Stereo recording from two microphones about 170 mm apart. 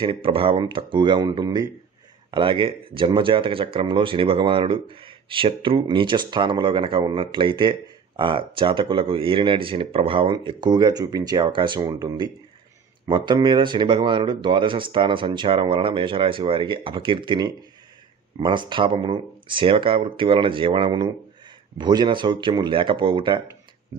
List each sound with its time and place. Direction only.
0.0 s speech: 30° right (ahead or behind)